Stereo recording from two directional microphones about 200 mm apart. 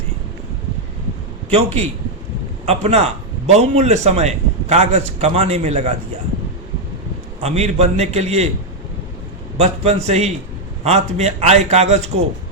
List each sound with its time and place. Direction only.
1.5 s a man's voice: 30° right (ahead or behind)
7.4 s a man's voice: 30° right (ahead or behind)
9.6 s a man's voice: 30° right (ahead or behind)